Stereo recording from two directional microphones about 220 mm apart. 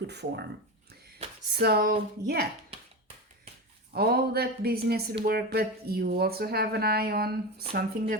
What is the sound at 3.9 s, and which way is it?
Speech, 45° right (ahead or behind).